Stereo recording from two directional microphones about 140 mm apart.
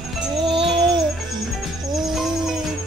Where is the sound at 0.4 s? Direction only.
40° right (ahead or behind).